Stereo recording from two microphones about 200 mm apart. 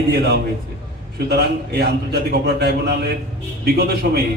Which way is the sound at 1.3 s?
55° right (ahead or behind).